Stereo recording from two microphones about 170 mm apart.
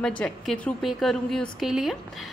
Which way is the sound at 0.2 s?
5° left (ahead or behind).